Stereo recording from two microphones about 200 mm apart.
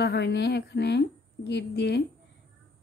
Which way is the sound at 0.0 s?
55° left (ahead or behind).